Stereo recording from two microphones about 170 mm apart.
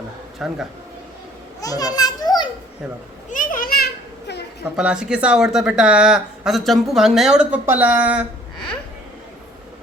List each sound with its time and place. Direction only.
0.3 s speech: 5° right (ahead or behind)
1.6 s a child's voice: 20° left (ahead or behind)
3.2 s children playing: 55° left (ahead or behind)
4.8 s speech: 5° right (ahead or behind)